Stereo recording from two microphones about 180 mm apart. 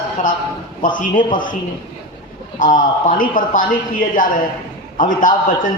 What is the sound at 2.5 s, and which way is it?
A man's voice, 45° left (ahead or behind).